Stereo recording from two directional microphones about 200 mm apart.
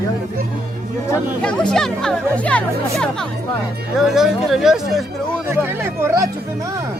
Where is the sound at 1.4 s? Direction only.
5° left (ahead or behind).